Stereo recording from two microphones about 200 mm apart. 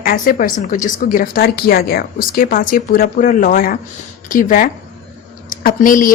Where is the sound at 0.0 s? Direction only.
45° left (ahead or behind).